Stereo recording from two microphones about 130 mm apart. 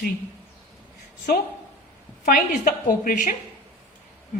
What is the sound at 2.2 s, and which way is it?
A woman's voice, 90° left.